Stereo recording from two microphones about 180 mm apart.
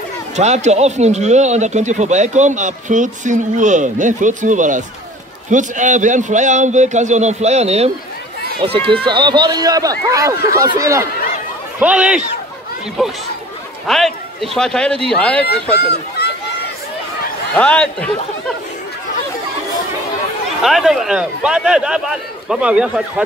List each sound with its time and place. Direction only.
0.4 s a man's voice: 40° right (ahead or behind); by 15.4 s 5° left (ahead or behind)
15.8 s speech: 65° left (ahead or behind)
17.6 s a man's voice: 5° left (ahead or behind)
20.6 s speech: centre (ahead or behind)